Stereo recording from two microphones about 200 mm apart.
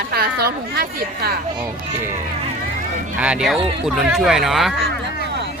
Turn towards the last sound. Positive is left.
turn(degrees=0)  # may be behind; listen again after turning